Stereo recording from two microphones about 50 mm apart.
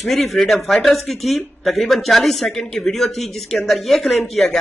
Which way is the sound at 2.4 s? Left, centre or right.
Centre.